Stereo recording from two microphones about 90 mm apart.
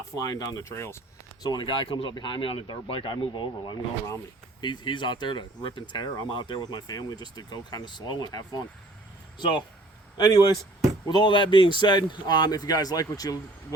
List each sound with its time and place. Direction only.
0.2 s speech: 45° left (ahead or behind)
1.4 s speech: 55° left (ahead or behind)
5.9 s a man's voice: 50° left (ahead or behind)
6.3 s speech: 70° left (ahead or behind)
6.6 s a man's voice: 55° left (ahead or behind)
9.4 s speech: 60° left (ahead or behind)
10.2 s a man's voice: 50° left (ahead or behind)
11.1 s a man's voice: 60° left (ahead or behind); by 13.7 s 45° left (ahead or behind)